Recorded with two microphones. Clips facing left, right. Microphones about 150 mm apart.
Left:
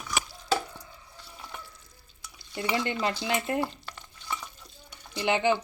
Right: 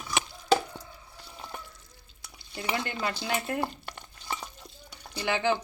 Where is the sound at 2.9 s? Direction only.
20° left (ahead or behind).